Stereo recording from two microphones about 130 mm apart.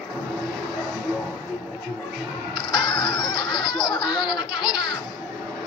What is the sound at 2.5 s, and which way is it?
Laughter, 35° left (ahead or behind).